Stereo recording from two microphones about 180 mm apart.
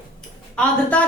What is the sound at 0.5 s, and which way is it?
Speech, 10° left (ahead or behind).